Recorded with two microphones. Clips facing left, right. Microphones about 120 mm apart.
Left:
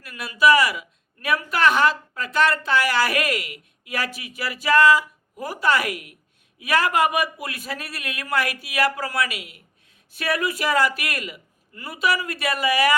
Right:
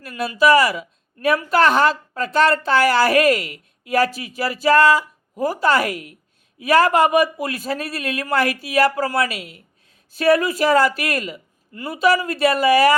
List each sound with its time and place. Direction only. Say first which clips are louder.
0.0 s a woman's voice: right 2 dB; 30° right (ahead or behind)